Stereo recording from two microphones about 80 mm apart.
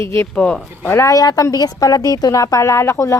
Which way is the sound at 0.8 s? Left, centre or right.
Left.